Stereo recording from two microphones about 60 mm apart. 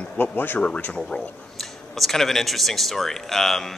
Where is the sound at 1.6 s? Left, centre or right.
Centre.